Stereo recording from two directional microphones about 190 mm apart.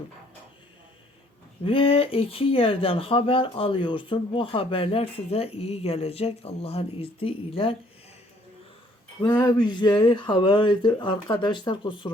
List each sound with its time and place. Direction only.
1.6 s speech: 30° left (ahead or behind)
9.2 s speech: 20° left (ahead or behind)